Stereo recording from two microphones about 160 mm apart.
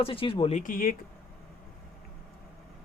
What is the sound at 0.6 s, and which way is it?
Speech, 60° left (ahead or behind).